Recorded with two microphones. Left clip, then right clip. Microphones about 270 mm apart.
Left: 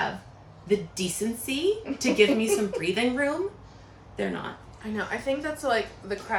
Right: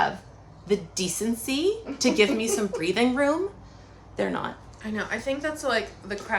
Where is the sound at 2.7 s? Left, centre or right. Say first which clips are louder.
Right 2 dB; centre.